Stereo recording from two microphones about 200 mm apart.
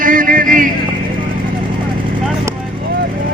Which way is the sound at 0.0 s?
40° right (ahead or behind).